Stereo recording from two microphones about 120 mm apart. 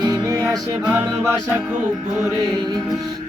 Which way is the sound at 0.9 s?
15° right (ahead or behind).